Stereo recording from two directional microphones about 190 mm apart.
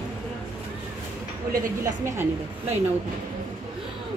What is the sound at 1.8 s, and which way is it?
Speech, 15° right (ahead or behind).